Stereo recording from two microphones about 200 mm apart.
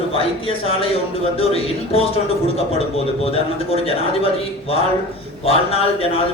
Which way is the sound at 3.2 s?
30° left (ahead or behind).